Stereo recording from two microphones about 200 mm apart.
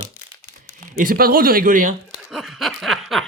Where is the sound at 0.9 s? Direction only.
45° right (ahead or behind).